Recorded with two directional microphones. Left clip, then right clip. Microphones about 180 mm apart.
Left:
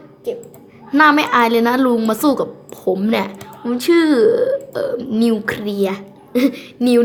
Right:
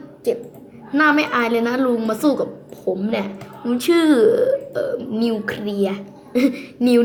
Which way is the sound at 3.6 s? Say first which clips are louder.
Left 2 dB; 10° left (ahead or behind).